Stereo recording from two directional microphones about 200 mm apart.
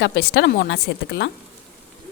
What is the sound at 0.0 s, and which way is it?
Speech, 55° left (ahead or behind).